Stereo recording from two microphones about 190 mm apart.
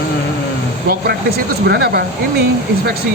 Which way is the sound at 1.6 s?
60° right (ahead or behind).